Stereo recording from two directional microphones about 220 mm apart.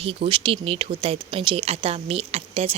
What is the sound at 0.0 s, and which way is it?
Speech, 25° right (ahead or behind).